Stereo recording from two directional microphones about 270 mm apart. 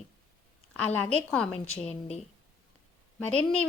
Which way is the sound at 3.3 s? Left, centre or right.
Centre.